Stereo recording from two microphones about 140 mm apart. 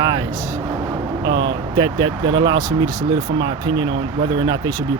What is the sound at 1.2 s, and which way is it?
Speech, 35° right (ahead or behind).